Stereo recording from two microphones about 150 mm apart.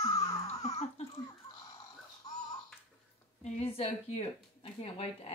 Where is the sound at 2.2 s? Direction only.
25° left (ahead or behind).